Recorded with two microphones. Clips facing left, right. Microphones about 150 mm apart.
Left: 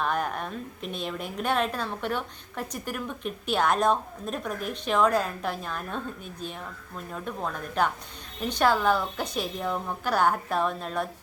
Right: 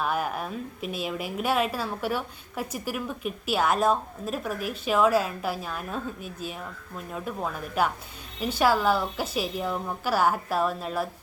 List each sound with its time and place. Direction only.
0.0 s a woman's voice: 5° right (ahead or behind)